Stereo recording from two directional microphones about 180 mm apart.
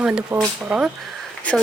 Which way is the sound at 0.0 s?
5° right (ahead or behind).